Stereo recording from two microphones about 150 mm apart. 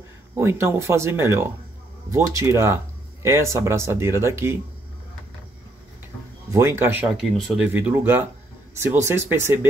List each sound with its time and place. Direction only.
0.4 s speech: 15° right (ahead or behind)
6.5 s speech: 15° right (ahead or behind)
7.2 s speech: centre (ahead or behind)
7.6 s speech: 10° right (ahead or behind)